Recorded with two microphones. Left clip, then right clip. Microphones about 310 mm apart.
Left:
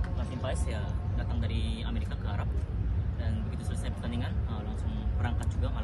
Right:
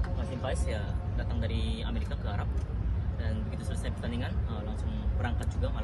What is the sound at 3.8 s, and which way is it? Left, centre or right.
Speech, centre.